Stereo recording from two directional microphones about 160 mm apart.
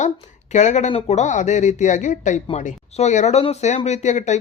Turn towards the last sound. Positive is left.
turn(degrees=45)  # may be behind; listen again after turning